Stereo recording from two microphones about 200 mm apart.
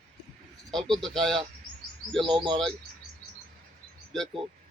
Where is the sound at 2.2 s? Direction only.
25° right (ahead or behind).